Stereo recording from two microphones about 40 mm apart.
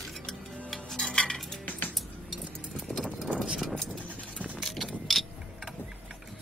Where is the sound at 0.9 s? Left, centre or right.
Centre.